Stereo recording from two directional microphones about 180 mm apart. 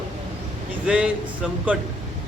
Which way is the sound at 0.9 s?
5° right (ahead or behind).